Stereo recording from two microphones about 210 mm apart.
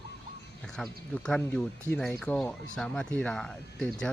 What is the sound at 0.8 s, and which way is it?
Speech, 5° left (ahead or behind).